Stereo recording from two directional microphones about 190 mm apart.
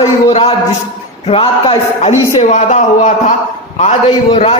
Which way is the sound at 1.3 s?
30° left (ahead or behind).